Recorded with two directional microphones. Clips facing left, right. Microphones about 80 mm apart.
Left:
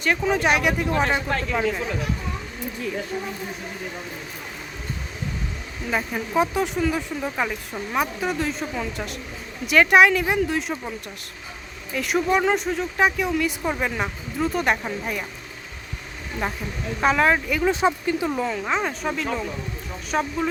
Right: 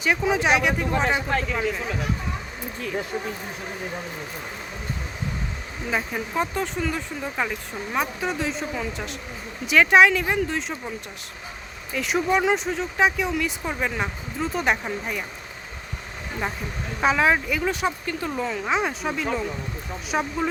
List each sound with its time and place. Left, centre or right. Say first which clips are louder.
0.0 s speech: left 1 dB; centre
5.9 s speech: left 2 dB; centre
11.9 s speech: left 1 dB; centre
17.0 s speech: left 1 dB; centre
17.7 s speech: left 7 dB; left
18.1 s speech: left 3 dB; centre